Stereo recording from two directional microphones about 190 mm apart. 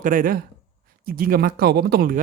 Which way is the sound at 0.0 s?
45° right (ahead or behind).